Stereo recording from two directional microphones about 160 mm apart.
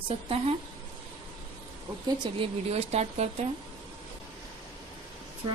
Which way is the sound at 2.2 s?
35° right (ahead or behind).